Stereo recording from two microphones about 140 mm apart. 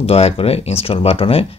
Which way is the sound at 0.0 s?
45° left (ahead or behind).